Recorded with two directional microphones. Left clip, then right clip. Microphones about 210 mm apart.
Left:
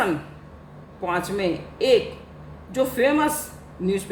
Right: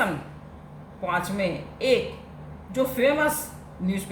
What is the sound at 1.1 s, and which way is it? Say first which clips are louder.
Speech: left 2 dB; 40° left (ahead or behind).